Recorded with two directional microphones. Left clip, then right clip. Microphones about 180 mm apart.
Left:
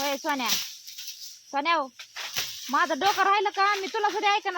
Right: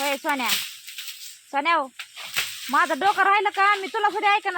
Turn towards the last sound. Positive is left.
turn(degrees=-35)  # may be behind; listen again after turning